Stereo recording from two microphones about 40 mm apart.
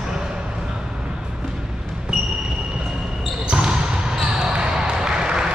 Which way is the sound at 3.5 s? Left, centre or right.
Right.